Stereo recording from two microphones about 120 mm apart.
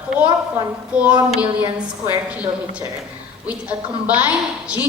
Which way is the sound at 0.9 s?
10° right (ahead or behind).